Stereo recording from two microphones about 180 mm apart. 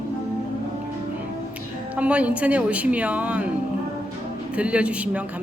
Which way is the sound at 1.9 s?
10° right (ahead or behind).